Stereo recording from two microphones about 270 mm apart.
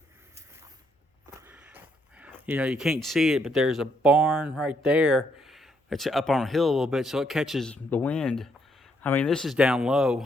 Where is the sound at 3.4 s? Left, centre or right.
Centre.